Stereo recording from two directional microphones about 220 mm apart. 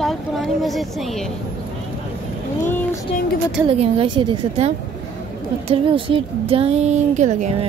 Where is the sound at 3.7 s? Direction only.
25° right (ahead or behind).